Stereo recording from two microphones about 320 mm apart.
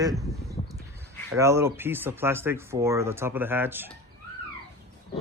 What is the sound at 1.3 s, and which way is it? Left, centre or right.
Speech, centre.